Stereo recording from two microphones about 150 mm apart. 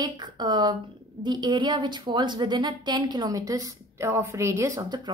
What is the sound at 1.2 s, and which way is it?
A woman's voice, 30° right (ahead or behind).